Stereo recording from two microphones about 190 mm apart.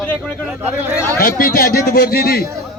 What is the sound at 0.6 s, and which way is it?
Speech, 10° right (ahead or behind).